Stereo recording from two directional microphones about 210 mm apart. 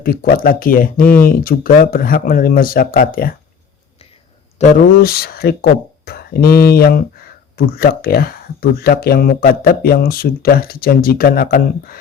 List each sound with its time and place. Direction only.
0.0 s speech: 45° left (ahead or behind)
4.5 s speech: 35° left (ahead or behind)